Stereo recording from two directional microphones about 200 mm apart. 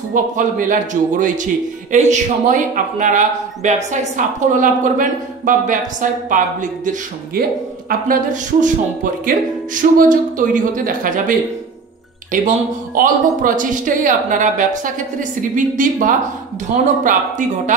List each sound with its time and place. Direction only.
0.1 s speech: 40° right (ahead or behind)